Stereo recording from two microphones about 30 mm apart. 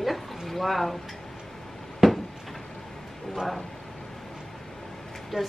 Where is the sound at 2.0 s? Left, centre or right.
Centre.